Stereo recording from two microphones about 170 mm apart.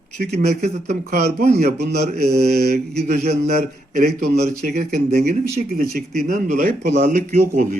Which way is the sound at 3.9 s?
70° right (ahead or behind).